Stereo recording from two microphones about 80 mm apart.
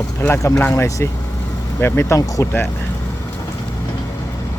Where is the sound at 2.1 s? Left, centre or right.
Left.